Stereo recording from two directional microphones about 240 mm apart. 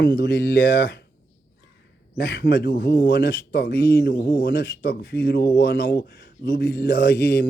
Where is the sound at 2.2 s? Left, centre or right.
Left.